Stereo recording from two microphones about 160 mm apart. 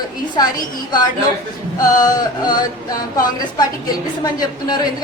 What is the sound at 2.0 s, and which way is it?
A woman's voice, 25° left (ahead or behind).